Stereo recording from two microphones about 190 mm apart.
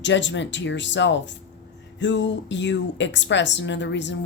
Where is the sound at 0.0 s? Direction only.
70° left (ahead or behind).